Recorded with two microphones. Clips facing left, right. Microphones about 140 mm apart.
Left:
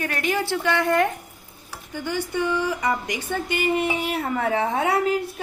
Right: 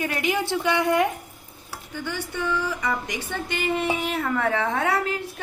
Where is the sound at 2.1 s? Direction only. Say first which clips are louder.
Left 4 dB; 15° left (ahead or behind).